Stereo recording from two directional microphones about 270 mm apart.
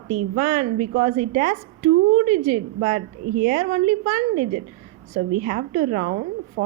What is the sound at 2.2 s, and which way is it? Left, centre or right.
Speech, right.